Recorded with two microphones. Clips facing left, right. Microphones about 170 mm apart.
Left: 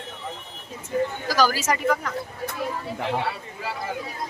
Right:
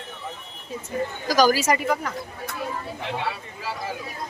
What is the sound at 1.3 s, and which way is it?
Speech, 15° right (ahead or behind).